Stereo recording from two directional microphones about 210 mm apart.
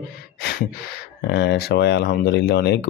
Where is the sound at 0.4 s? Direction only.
50° left (ahead or behind).